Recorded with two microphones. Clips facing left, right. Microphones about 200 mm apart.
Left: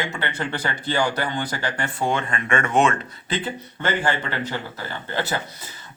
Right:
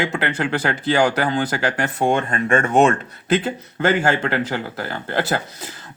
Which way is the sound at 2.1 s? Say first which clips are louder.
Right 5 dB; 55° right (ahead or behind).